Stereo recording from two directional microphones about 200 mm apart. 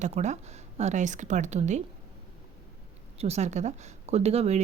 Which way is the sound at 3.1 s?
30° right (ahead or behind).